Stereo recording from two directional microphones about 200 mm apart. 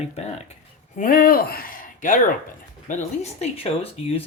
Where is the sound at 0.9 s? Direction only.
45° left (ahead or behind).